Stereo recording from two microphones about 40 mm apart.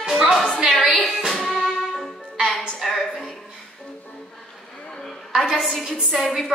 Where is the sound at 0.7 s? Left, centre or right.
Left.